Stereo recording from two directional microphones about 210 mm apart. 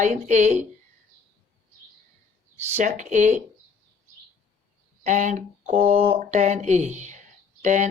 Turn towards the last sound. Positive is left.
turn(degrees=-35)  # may be behind; listen again after turning